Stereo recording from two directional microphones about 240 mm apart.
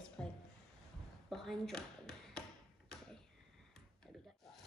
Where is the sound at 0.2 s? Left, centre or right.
Centre.